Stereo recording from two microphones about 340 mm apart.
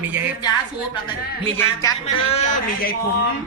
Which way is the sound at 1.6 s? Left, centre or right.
Centre.